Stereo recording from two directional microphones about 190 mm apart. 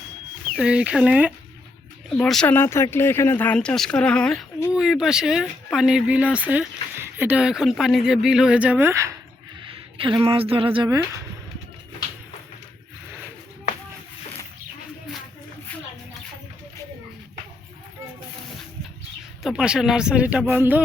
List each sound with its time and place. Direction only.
0.5 s speech: 5° right (ahead or behind)
10.0 s speech: 25° right (ahead or behind)
19.4 s speech: 5° right (ahead or behind)